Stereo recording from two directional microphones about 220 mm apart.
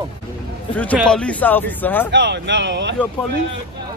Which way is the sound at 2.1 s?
50° right (ahead or behind).